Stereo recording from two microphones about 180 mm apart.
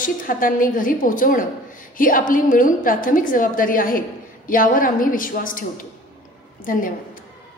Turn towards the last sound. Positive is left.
turn(degrees=50)  # may be behind; listen again after turning